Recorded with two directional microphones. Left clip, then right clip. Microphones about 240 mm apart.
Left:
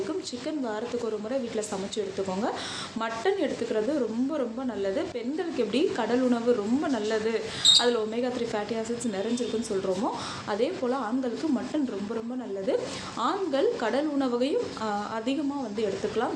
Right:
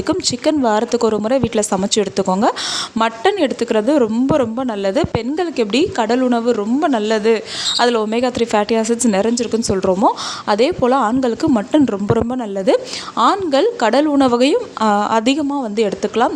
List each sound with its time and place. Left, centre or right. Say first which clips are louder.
0.1 s a woman's voice: right 16 dB; right